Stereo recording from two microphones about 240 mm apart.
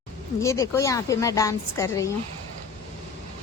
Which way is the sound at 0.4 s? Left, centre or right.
Centre.